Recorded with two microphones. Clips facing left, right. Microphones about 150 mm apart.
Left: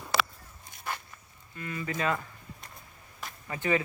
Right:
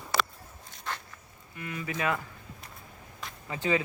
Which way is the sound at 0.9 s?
10° left (ahead or behind).